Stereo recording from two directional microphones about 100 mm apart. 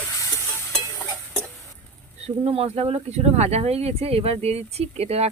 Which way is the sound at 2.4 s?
85° right.